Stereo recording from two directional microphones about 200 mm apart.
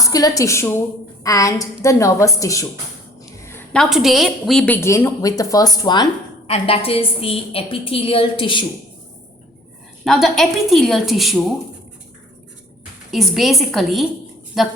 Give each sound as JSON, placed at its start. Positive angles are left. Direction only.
{"t": 0.0, "sound": "a woman's voice", "side_deg": 15}
{"t": 10.0, "sound": "a woman's voice", "side_deg": 0}
{"t": 13.1, "sound": "a woman's voice", "side_deg": 0}